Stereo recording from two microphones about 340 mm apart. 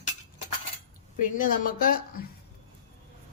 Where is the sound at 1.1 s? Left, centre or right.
Left.